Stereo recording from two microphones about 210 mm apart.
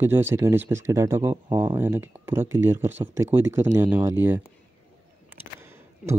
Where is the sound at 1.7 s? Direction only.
10° right (ahead or behind).